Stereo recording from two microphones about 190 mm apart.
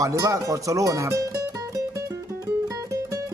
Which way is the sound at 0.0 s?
15° right (ahead or behind).